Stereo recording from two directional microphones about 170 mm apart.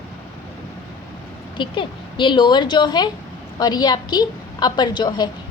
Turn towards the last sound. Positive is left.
turn(degrees=25)  # may be behind; listen again after turning